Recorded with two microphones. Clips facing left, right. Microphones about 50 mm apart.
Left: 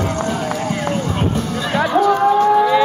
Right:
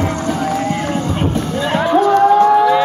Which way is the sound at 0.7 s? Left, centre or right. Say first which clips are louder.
Right 2 dB; right.